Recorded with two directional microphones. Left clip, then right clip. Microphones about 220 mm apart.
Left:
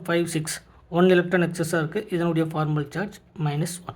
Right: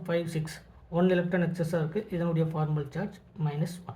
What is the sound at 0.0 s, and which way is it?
Speech, 50° left (ahead or behind).